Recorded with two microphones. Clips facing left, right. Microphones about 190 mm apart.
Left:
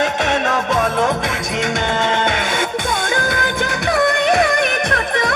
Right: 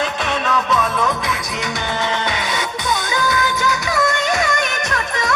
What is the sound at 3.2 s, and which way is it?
Music, 55° left (ahead or behind).